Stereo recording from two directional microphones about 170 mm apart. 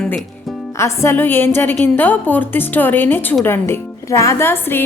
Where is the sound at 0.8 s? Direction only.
15° left (ahead or behind).